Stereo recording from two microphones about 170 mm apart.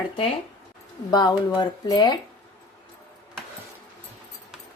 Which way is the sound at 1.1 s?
20° left (ahead or behind).